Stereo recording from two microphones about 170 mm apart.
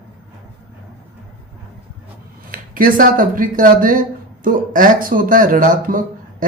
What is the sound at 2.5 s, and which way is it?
Speech, 55° right (ahead or behind).